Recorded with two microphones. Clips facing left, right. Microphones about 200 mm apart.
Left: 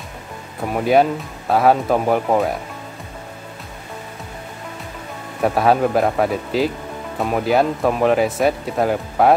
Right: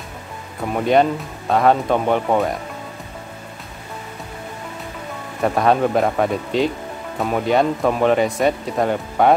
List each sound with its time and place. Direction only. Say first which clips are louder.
0.7 s speech: left 1 dB; 5° left (ahead or behind)
5.4 s speech: left 1 dB; 5° left (ahead or behind)